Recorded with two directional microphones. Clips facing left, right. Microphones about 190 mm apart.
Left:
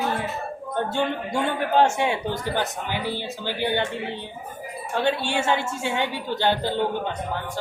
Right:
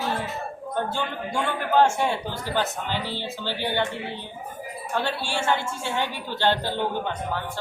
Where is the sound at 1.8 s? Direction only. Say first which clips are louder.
Even; 15° left (ahead or behind).